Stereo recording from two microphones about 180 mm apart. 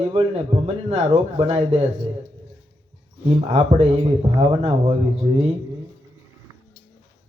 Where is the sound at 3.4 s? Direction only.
35° right (ahead or behind).